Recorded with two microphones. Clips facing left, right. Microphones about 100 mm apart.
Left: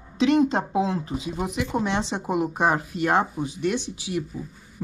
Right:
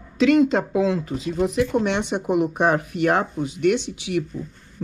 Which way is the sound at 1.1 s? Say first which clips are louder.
Right 5 dB; 10° left (ahead or behind).